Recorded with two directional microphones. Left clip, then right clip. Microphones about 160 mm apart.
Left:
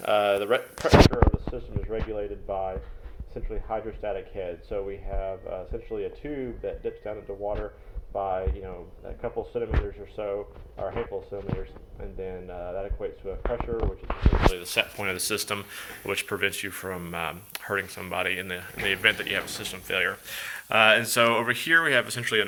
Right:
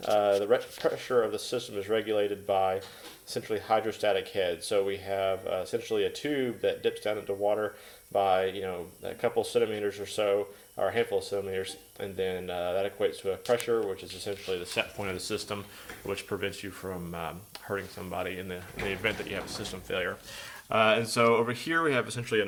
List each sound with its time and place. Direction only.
0.0 s speech: 5° left (ahead or behind)
1.5 s speech: 15° right (ahead or behind)
14.5 s speech: 5° left (ahead or behind)